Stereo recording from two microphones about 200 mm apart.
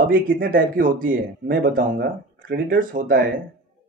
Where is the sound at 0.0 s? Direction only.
45° right (ahead or behind).